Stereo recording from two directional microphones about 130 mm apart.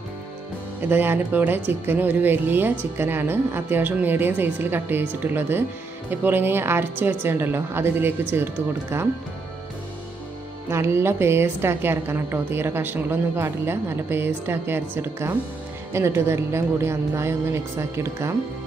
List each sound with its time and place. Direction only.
0.8 s a woman's voice: 15° right (ahead or behind)
10.7 s a woman's voice: 20° right (ahead or behind)